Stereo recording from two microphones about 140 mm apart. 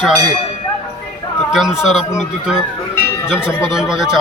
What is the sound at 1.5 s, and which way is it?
Speech, centre (ahead or behind).